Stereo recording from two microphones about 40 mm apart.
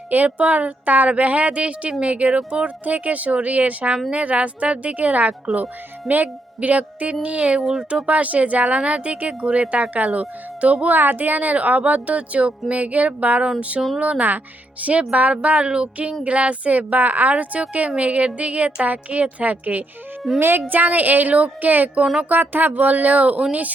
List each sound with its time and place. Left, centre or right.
0.3 s speech: right
10.9 s speech: right
20.4 s a woman's voice: right